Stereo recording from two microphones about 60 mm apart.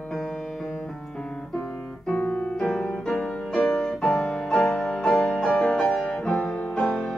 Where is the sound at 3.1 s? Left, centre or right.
Centre.